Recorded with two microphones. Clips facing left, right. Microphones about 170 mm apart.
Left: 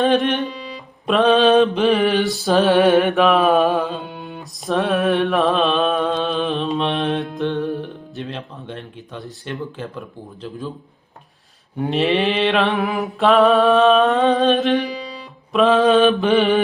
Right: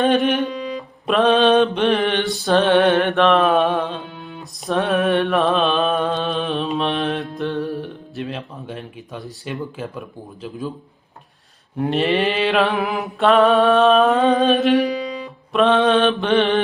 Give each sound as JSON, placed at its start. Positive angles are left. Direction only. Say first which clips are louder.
{"t": 0.0, "sound": "mantra", "louder": "even", "side_deg": 0}
{"t": 4.1, "sound": "music", "louder": "left 2 dB", "side_deg": 60}
{"t": 4.6, "sound": "mantra", "louder": "even", "side_deg": 0}
{"t": 11.8, "sound": "mantra", "louder": "even", "side_deg": 0}